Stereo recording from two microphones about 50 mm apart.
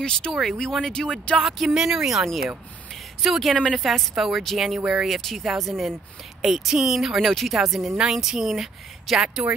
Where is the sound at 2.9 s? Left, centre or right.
Centre.